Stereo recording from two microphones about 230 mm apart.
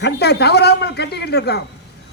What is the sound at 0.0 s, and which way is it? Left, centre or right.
A man's voice, left.